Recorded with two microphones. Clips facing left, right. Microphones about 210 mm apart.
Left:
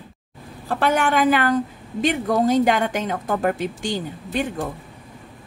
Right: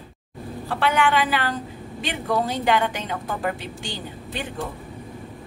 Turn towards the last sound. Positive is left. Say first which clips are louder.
# left 7 dB
turn(degrees=45)  # may be behind; listen again after turning